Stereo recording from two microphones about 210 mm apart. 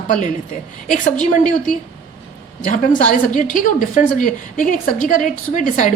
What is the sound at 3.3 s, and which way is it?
A woman's voice, 40° left (ahead or behind).